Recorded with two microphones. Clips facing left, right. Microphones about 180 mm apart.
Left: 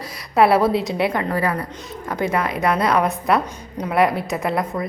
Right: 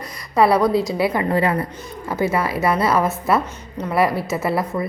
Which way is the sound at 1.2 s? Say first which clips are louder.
Right 3 dB; 25° right (ahead or behind).